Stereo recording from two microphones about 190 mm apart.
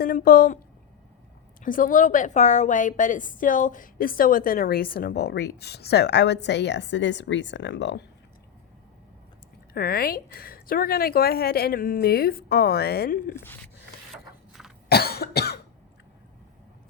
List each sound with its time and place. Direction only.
0.0 s a woman's voice: 50° left (ahead or behind)
1.6 s a woman's voice: 45° left (ahead or behind); by 8.0 s 65° left (ahead or behind)
9.7 s a woman's voice: 50° left (ahead or behind)
13.3 s speech: 10° left (ahead or behind)
14.8 s cough: 55° left (ahead or behind)